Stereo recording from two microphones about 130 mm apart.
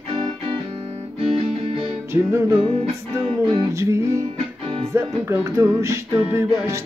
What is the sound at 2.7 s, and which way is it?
Music, 55° right (ahead or behind).